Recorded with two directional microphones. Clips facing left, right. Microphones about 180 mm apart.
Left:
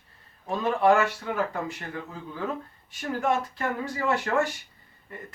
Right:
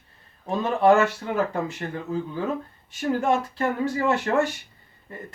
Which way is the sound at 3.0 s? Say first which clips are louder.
Right 4 dB; 25° right (ahead or behind).